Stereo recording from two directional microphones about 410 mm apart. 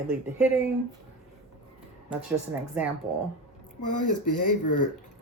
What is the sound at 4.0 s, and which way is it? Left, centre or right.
Speech, left.